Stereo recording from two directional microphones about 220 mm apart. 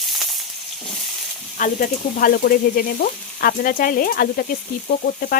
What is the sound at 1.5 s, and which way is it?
Frying, 40° left (ahead or behind).